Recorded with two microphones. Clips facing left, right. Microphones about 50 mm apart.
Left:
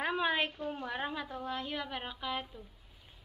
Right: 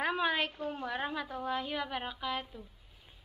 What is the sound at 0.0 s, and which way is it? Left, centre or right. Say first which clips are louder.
A woman's voice: right 1 dB; centre.